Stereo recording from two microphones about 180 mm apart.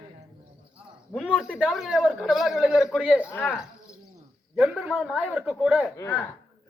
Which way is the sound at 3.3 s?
10° left (ahead or behind).